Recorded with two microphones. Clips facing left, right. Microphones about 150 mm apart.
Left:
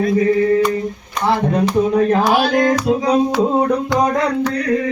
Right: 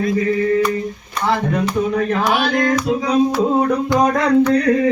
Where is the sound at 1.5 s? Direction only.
35° left (ahead or behind).